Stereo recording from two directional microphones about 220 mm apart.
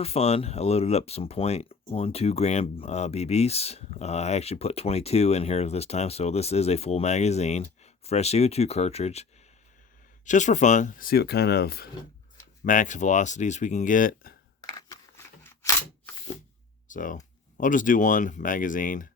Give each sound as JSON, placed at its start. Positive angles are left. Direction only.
{"t": 0.0, "sound": "speech", "side_deg": 25}
{"t": 10.2, "sound": "speech", "side_deg": 35}
{"t": 14.6, "sound": "scissors", "side_deg": 15}
{"t": 16.9, "sound": "speech", "side_deg": 35}